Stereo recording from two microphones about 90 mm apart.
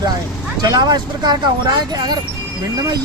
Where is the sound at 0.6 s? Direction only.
50° right (ahead or behind).